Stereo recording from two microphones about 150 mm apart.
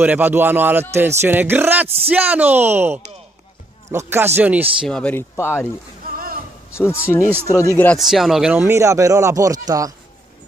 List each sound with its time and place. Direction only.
0.0 s speech: 10° right (ahead or behind)
4.8 s speech: 5° left (ahead or behind)
6.7 s speech: 15° left (ahead or behind)
7.2 s speech: 15° right (ahead or behind)
7.4 s speech: 15° left (ahead or behind)
8.0 s speech: centre (ahead or behind)
8.5 s speech: 15° right (ahead or behind)